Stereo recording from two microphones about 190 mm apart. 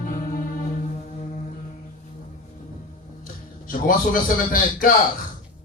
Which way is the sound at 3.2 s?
45° left (ahead or behind).